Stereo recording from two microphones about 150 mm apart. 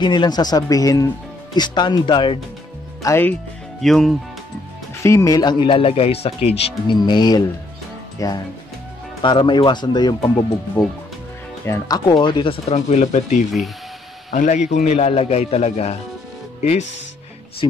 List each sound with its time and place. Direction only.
0.0 s speech: 30° left (ahead or behind)
3.0 s speech: 15° left (ahead or behind)
3.8 s speech: centre (ahead or behind)
5.0 s speech: 20° left (ahead or behind)
9.2 s a man's voice: 30° left (ahead or behind)